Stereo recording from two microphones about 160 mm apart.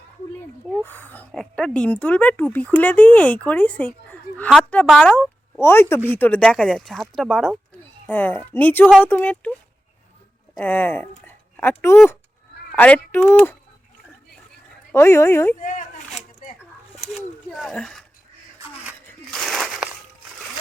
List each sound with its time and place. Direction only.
0.8 s speech: 10° left (ahead or behind)
10.6 s speech: 10° left (ahead or behind)
14.9 s speech: 15° left (ahead or behind)
16.9 s a sound: centre (ahead or behind)
17.5 s speech: centre (ahead or behind)
19.3 s a sound: 5° left (ahead or behind)